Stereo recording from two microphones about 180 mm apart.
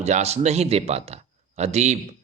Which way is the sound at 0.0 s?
35° right (ahead or behind).